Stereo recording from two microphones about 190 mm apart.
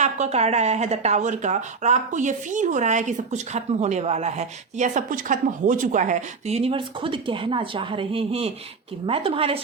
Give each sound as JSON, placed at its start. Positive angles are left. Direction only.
{"t": 0.0, "sound": "a woman's voice", "side_deg": -35}